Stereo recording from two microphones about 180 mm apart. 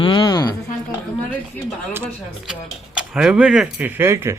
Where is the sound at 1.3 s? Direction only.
10° left (ahead or behind).